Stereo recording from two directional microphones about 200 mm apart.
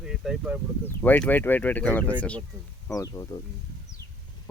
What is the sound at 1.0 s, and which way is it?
Speech, 10° left (ahead or behind).